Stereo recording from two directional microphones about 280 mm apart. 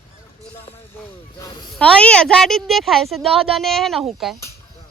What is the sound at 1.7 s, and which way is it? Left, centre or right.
A woman's voice, centre.